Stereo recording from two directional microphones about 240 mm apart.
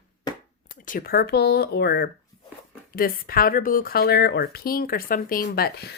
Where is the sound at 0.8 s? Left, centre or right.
Left.